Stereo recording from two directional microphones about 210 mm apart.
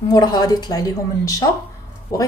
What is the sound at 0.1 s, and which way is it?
A woman's voice, 20° left (ahead or behind).